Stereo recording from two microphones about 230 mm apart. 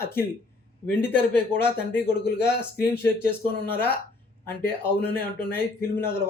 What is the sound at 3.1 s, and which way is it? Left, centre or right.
Speech, right.